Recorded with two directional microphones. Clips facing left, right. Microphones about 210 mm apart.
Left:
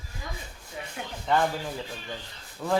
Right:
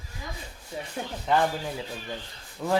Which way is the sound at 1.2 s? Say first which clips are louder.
Right 1 dB; 5° right (ahead or behind).